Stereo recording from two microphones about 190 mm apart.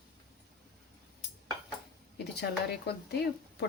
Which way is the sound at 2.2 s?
60° left (ahead or behind).